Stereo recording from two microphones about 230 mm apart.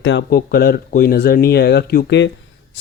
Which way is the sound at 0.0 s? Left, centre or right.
Left.